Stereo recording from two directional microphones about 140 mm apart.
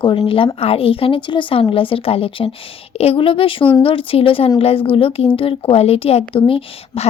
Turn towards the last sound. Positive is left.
turn(degrees=40)  # may be behind; listen again after turning